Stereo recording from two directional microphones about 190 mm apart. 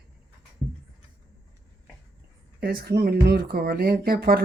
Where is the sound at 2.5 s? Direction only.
55° right (ahead or behind).